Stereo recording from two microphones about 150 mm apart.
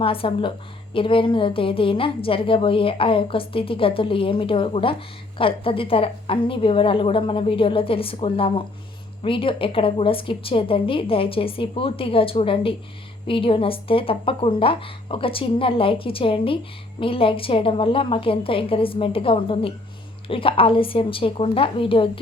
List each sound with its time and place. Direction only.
0.0 s a woman's voice: 35° left (ahead or behind)